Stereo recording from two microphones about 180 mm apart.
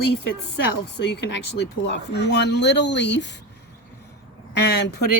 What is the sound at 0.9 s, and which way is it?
Speech, 70° left (ahead or behind).